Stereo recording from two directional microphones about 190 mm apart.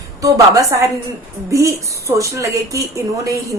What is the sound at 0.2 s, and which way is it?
A woman's voice, 15° right (ahead or behind).